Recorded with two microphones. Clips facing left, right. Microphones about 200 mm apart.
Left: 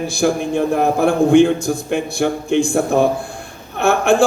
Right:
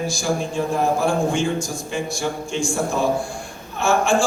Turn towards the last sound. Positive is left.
turn(degrees=60)  # may be behind; listen again after turning